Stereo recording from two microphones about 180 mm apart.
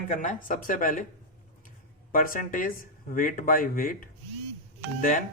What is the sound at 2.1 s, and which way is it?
Speech, 50° left (ahead or behind).